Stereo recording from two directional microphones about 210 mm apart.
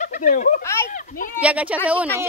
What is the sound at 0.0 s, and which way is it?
Speech, 40° left (ahead or behind).